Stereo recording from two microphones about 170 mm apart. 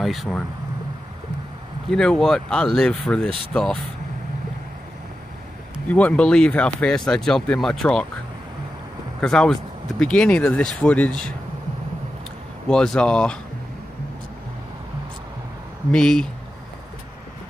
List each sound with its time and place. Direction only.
0.0 s speech: centre (ahead or behind)
1.9 s speech: 5° left (ahead or behind)
5.9 s speech: 10° left (ahead or behind)
9.2 s speech: 5° left (ahead or behind)
12.6 s speech: 5° left (ahead or behind)
15.9 s speech: 5° left (ahead or behind)